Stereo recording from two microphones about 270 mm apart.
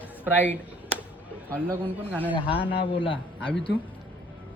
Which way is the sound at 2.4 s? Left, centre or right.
Centre.